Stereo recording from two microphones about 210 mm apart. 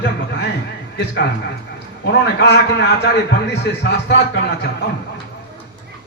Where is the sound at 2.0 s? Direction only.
55° left (ahead or behind).